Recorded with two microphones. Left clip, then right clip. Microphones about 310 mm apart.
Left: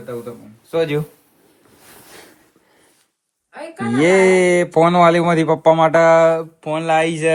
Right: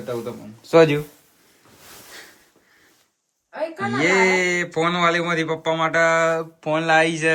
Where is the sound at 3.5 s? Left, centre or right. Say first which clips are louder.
Even; right.